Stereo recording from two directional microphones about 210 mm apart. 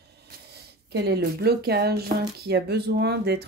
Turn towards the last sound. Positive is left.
turn(degrees=-50)  # may be behind; listen again after turning